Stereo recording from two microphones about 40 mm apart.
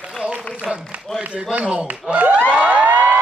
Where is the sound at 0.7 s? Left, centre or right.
Right.